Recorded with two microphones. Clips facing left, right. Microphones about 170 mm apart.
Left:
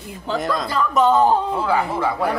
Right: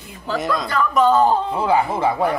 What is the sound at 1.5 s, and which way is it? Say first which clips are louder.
Speech: right 2 dB; 20° right (ahead or behind).